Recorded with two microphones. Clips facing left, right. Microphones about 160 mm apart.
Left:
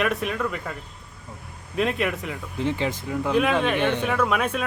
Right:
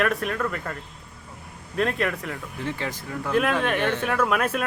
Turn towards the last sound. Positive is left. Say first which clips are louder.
# even
turn(degrees=-5)  # may be behind; listen again after turning